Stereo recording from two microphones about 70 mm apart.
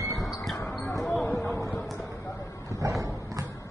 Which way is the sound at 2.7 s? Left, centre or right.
Right.